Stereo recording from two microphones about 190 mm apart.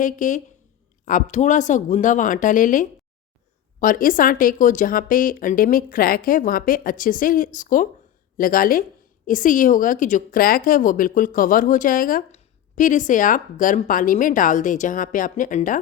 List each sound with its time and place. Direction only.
0.0 s a woman's voice: 40° left (ahead or behind)